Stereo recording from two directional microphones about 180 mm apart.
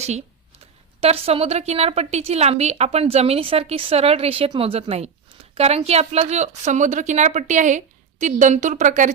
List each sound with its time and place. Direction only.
0.0 s a woman's voice: 35° right (ahead or behind)